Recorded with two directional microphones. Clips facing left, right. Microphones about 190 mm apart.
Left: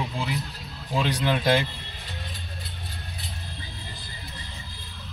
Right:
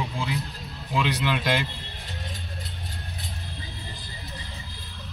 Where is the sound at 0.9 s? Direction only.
45° left (ahead or behind).